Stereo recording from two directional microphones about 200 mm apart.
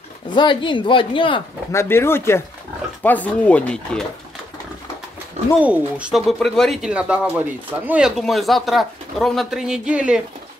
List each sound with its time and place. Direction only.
0.3 s speech: 25° left (ahead or behind)
1.7 s speech: 15° left (ahead or behind)
5.6 s speech: 5° right (ahead or behind)